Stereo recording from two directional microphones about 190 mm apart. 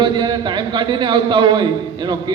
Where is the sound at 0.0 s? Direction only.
25° right (ahead or behind).